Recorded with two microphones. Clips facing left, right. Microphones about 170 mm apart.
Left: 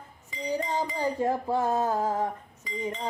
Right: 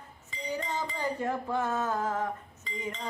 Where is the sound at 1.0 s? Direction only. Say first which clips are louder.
Left 4 dB; 35° left (ahead or behind).